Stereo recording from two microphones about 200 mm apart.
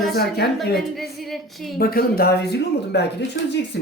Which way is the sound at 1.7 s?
50° left (ahead or behind).